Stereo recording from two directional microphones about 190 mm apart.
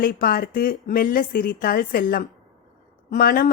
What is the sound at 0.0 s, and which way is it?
Speech, 50° left (ahead or behind).